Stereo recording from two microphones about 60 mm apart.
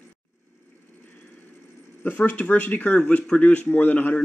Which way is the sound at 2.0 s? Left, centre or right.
Left.